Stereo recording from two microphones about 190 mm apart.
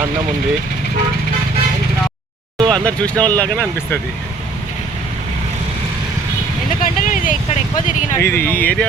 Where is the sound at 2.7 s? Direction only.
5° left (ahead or behind).